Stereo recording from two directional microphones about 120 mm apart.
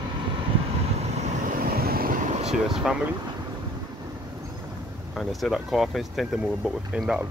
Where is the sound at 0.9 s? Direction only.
65° right (ahead or behind); by 1.5 s 80° right.